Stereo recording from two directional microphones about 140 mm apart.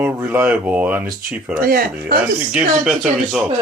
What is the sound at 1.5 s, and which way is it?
Speech, 90° right.